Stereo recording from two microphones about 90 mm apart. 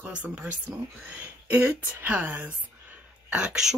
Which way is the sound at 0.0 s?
15° right (ahead or behind).